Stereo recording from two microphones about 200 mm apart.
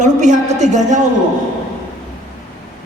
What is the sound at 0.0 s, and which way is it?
Speech, 35° right (ahead or behind).